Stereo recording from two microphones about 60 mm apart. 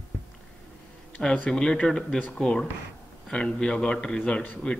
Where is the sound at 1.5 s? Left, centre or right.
Centre.